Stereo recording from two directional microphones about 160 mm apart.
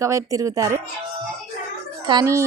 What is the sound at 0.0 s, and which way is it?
Speech, 20° right (ahead or behind).